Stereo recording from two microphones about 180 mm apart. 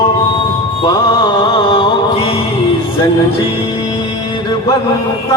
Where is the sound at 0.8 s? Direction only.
25° left (ahead or behind).